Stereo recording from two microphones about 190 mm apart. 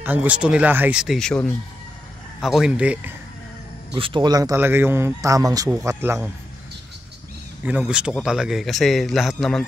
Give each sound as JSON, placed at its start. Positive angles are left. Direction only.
{"t": 0.0, "sound": "speech", "side_deg": -10}
{"t": 3.9, "sound": "speech", "side_deg": -25}
{"t": 7.6, "sound": "speech", "side_deg": -5}